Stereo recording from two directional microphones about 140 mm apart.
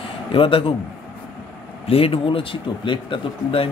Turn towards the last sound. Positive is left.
turn(degrees=35)  # may be behind; listen again after turning